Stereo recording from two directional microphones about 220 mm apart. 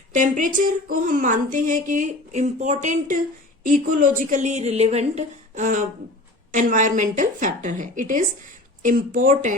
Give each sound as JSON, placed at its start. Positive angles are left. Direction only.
{"t": 0.1, "sound": "speech", "side_deg": -35}